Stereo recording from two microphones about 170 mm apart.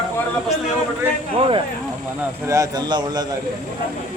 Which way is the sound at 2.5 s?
20° right (ahead or behind).